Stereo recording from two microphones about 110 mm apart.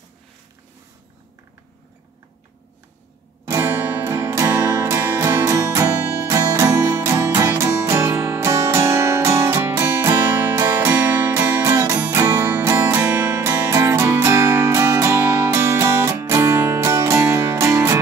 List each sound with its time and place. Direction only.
3.4 s music: 20° right (ahead or behind)
10.3 s music: 15° right (ahead or behind)
13.5 s music: 25° right (ahead or behind)